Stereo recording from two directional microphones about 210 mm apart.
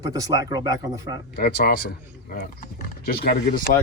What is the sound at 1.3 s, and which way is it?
Speech, 45° left (ahead or behind).